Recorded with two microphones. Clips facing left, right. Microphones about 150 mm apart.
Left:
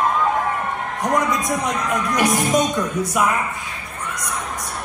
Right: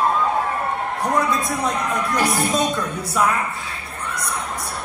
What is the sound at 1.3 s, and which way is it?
A man's voice, 15° left (ahead or behind).